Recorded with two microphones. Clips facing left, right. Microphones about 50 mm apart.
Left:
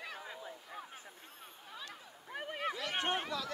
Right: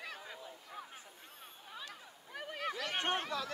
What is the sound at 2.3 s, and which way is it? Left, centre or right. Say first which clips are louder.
Speech: left 2 dB; centre.